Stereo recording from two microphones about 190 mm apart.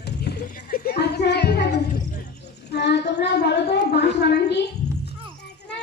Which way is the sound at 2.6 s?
60° left (ahead or behind).